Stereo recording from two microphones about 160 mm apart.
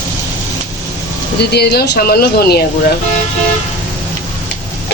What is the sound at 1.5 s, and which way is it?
Speech, 85° left.